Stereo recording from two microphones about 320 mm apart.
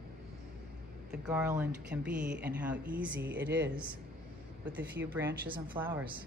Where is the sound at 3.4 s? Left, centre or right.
Right.